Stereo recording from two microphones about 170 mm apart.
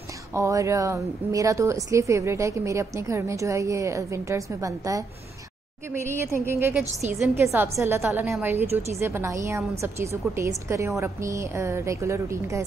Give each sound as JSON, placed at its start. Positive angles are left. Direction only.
{"t": 0.3, "sound": "a woman's voice", "side_deg": -15}